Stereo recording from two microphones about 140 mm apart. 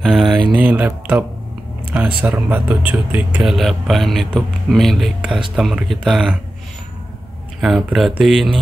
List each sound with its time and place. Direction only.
0.0 s a sound: centre (ahead or behind)
0.5 s speech: 10° right (ahead or behind)
7.6 s speech: centre (ahead or behind)